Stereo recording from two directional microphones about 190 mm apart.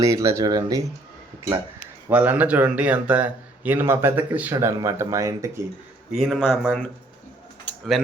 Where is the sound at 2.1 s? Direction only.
10° right (ahead or behind).